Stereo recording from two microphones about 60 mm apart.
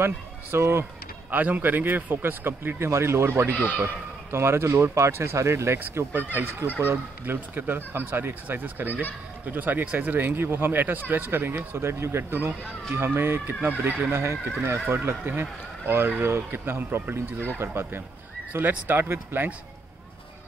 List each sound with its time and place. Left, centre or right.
0.0 s speech: right
1.3 s speech: right
6.1 s speech: right
14.1 s speech: right